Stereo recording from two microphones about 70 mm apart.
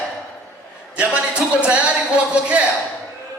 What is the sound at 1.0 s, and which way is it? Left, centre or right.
A man's voice, centre.